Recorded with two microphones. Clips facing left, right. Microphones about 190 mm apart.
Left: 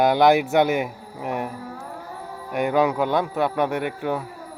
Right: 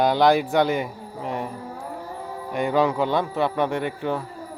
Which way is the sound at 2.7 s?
5° left (ahead or behind).